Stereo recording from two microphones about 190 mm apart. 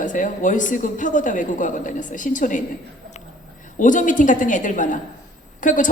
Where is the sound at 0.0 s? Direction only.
45° left (ahead or behind).